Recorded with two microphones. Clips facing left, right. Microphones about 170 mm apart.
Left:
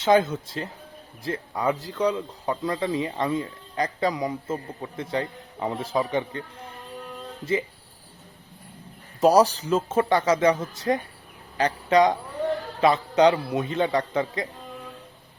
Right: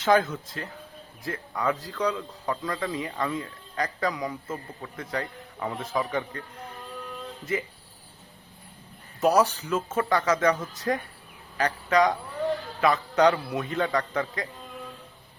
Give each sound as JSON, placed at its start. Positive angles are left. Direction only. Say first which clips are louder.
{"t": 0.0, "sound": "speech", "louder": "left 3 dB", "side_deg": 25}
{"t": 9.2, "sound": "speech", "louder": "left 4 dB", "side_deg": 35}